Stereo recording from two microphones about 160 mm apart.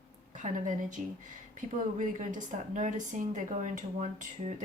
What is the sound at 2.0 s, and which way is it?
Speech, 50° right (ahead or behind).